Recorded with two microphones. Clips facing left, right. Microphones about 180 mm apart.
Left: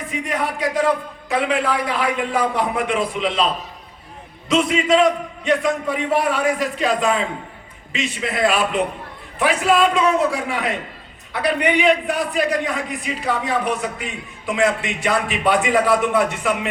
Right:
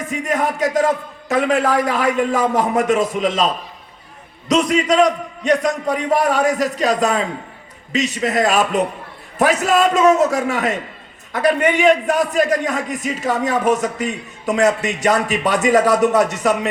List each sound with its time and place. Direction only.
0.0 s a man's voice: 45° right (ahead or behind)